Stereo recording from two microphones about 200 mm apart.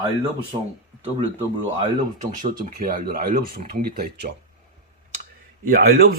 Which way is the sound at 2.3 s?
40° right (ahead or behind).